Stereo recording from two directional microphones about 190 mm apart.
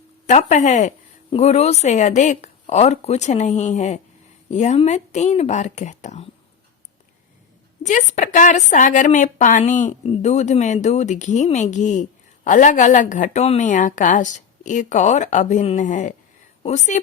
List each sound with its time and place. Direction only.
0.3 s a woman's voice: 35° left (ahead or behind)
7.9 s a woman's voice: 40° left (ahead or behind)